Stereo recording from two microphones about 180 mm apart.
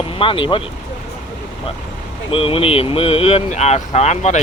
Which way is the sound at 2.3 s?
30° left (ahead or behind).